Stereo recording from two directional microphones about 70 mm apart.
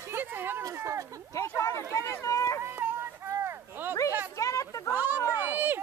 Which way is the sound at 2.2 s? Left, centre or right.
Left.